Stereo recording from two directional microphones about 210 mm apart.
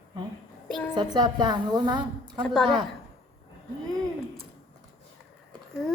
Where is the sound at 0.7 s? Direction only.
5° left (ahead or behind).